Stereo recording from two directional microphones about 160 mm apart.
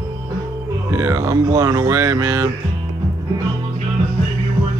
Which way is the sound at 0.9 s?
20° right (ahead or behind).